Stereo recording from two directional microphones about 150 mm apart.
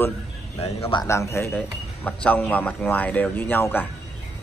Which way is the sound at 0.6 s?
40° left (ahead or behind).